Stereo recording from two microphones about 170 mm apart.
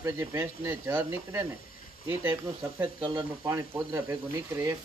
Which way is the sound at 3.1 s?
20° right (ahead or behind).